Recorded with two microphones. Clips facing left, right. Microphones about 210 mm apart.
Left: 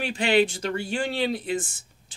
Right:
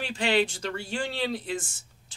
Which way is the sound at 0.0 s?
15° left (ahead or behind).